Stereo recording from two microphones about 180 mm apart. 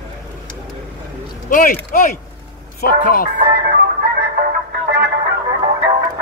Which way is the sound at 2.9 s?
50° left (ahead or behind).